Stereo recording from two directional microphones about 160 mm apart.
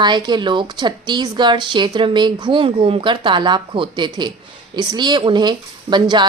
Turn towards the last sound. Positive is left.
turn(degrees=-30)  # may be behind; listen again after turning